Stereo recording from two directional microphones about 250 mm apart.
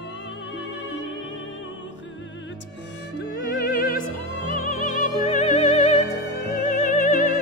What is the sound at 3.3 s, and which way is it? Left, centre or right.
Music, left.